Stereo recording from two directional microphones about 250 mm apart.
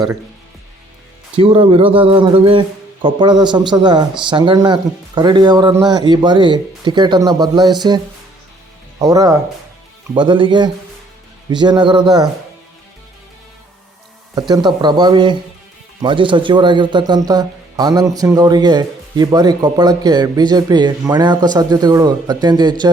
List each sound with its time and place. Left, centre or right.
1.4 s a man's voice: right
14.3 s speech: centre